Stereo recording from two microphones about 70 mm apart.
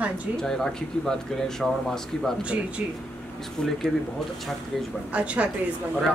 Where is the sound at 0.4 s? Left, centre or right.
Centre.